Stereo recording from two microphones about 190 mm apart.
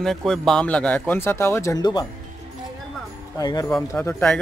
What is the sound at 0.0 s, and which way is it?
Speech, centre (ahead or behind).